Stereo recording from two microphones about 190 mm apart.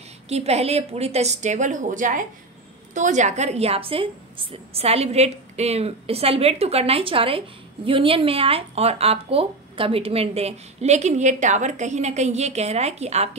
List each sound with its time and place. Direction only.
0.3 s a woman's voice: 35° right (ahead or behind)